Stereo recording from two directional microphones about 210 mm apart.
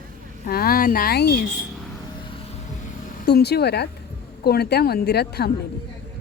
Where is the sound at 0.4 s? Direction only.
45° left (ahead or behind).